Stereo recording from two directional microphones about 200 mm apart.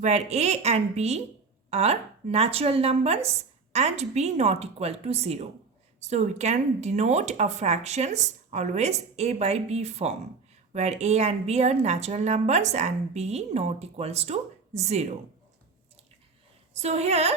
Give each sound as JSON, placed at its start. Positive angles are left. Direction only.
{"t": 0.0, "sound": "a woman's voice", "side_deg": -35}
{"t": 16.7, "sound": "a woman's voice", "side_deg": -30}